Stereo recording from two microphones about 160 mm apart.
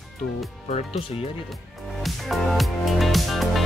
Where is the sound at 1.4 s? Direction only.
Centre (ahead or behind).